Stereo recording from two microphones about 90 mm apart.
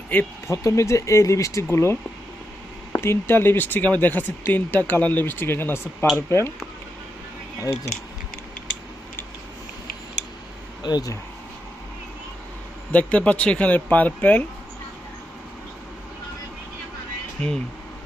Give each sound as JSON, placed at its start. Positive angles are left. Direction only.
{"t": 0.1, "sound": "speech", "side_deg": 20}
{"t": 0.4, "sound": "speech", "side_deg": 35}
{"t": 7.6, "sound": "speech", "side_deg": 40}
{"t": 10.8, "sound": "speech", "side_deg": 50}
{"t": 12.9, "sound": "speech", "side_deg": 15}
{"t": 17.4, "sound": "speech", "side_deg": 10}